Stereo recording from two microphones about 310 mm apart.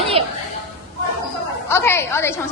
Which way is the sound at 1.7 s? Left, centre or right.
Centre.